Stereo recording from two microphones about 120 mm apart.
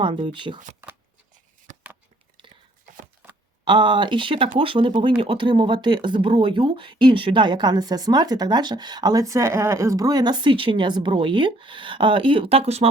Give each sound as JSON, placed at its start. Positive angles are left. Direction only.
{"t": 0.0, "sound": "speech", "side_deg": -45}
{"t": 0.8, "sound": "shuffling cards", "side_deg": -20}
{"t": 3.2, "sound": "a sound", "side_deg": -10}
{"t": 3.6, "sound": "speech", "side_deg": -40}